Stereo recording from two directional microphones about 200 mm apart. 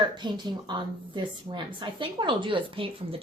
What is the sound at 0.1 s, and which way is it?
A woman's voice, 20° right (ahead or behind).